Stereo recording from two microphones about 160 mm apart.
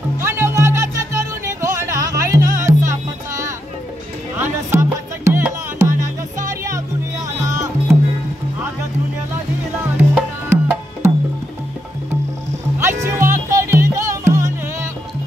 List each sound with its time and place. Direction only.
0.2 s music: 15° right (ahead or behind)
7.5 s music: 20° right (ahead or behind)
9.9 s music: 10° right (ahead or behind)
13.0 s music: 15° right (ahead or behind)